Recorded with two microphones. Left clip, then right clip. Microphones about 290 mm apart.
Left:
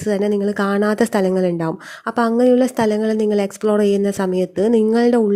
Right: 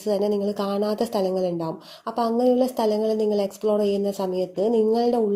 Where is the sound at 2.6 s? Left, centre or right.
Left.